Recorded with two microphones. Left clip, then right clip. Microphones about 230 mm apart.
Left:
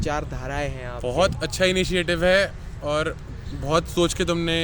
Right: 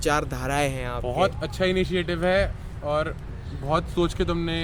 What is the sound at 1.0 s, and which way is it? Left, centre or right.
Speech, left.